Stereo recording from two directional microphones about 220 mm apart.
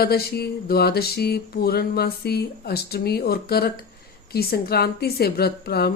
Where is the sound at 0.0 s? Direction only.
45° left (ahead or behind).